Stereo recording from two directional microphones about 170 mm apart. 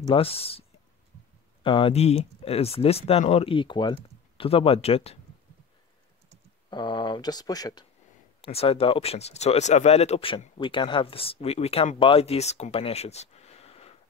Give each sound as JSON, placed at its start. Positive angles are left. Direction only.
{"t": 0.1, "sound": "speech", "side_deg": 35}
{"t": 6.7, "sound": "speech", "side_deg": 25}
{"t": 8.4, "sound": "speech", "side_deg": 35}